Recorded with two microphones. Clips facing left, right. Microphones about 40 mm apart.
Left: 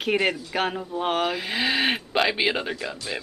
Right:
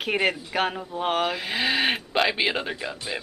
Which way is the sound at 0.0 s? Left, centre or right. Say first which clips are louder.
Left 1 dB; centre.